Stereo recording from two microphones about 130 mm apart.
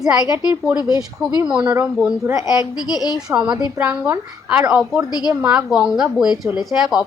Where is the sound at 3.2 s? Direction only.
5° right (ahead or behind).